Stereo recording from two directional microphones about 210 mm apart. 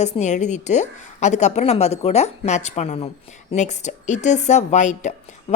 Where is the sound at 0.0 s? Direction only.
35° left (ahead or behind).